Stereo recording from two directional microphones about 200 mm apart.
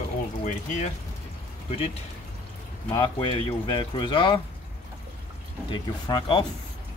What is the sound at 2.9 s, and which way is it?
Speech, 25° left (ahead or behind).